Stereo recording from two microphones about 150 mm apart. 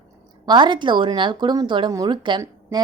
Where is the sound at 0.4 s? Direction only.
30° right (ahead or behind).